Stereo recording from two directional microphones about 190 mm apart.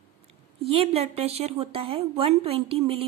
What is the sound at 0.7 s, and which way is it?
A woman's voice, 30° right (ahead or behind).